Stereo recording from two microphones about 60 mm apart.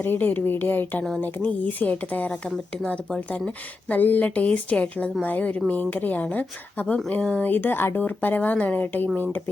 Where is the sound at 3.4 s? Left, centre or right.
Left.